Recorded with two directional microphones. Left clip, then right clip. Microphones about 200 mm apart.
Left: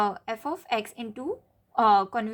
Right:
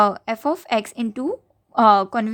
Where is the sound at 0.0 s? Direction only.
40° right (ahead or behind).